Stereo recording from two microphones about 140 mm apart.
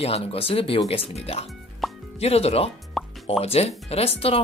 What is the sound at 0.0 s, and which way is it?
Speech, 45° left (ahead or behind).